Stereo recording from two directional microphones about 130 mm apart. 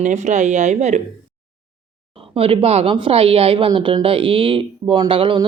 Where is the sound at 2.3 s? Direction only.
45° right (ahead or behind).